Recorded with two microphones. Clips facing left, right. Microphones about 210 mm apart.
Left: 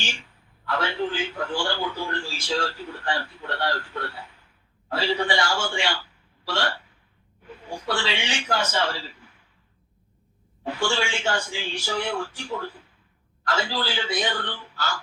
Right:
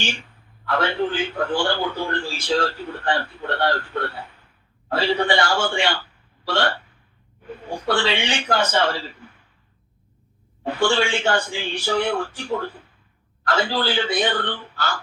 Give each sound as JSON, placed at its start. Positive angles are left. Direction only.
{"t": 0.0, "sound": "a man's voice", "side_deg": -60}
{"t": 10.6, "sound": "a man's voice", "side_deg": -55}